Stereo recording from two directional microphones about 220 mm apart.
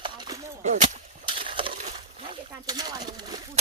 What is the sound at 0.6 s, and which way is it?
Speech, 35° right (ahead or behind).